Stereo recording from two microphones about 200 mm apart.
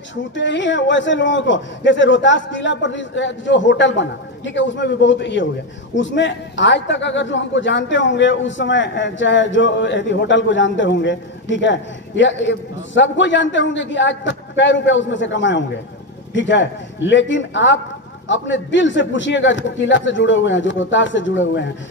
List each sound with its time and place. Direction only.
0.1 s a man's voice: 65° left (ahead or behind)